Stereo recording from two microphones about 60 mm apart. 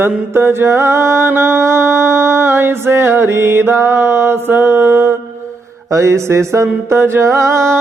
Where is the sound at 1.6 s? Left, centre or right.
Right.